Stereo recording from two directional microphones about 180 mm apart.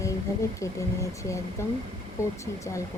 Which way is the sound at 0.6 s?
15° left (ahead or behind).